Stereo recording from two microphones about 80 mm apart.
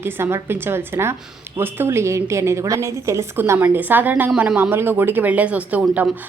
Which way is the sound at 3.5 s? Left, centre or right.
Right.